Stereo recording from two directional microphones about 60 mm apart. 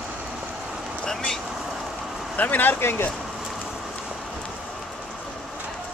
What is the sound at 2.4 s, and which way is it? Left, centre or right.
Speech, left.